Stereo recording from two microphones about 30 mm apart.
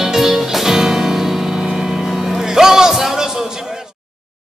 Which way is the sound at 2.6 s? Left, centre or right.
Centre.